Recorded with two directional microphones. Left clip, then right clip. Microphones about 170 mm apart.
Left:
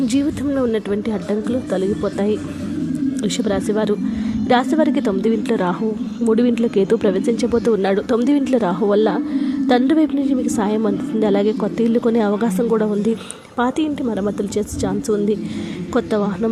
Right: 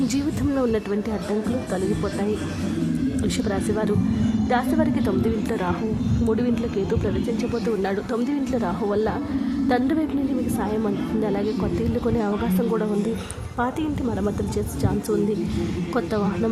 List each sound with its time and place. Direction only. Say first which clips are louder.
3.5 s speech: left 6 dB; 20° left (ahead or behind)
16.0 s speech: left 6 dB; 20° left (ahead or behind)